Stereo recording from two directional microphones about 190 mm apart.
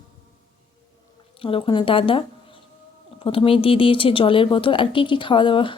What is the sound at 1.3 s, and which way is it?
Speech, 30° left (ahead or behind).